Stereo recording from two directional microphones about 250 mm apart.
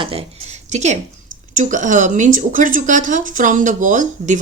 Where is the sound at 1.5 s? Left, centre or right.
Right.